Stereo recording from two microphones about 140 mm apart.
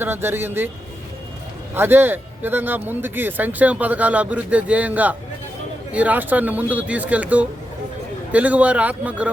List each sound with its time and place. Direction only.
0.0 s speech: 15° right (ahead or behind)
1.7 s speech: 15° right (ahead or behind)